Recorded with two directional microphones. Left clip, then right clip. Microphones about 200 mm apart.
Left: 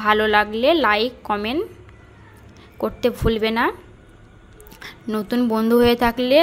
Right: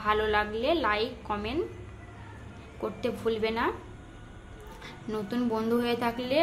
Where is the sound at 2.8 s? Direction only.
45° left (ahead or behind).